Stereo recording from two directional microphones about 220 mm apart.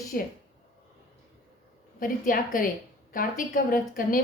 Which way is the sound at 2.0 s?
40° left (ahead or behind).